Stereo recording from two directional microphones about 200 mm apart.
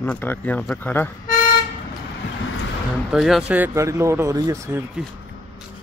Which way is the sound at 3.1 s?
Centre (ahead or behind).